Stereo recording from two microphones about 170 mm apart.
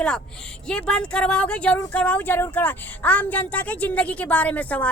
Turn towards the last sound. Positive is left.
turn(degrees=10)  # may be behind; listen again after turning